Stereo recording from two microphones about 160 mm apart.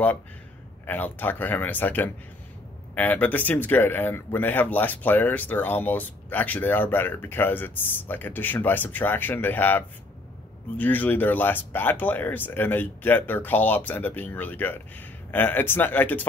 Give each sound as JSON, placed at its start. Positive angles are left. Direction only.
{"t": 0.8, "sound": "speech", "side_deg": 10}